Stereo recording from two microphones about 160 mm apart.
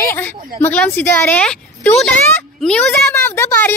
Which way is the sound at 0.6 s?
10° left (ahead or behind).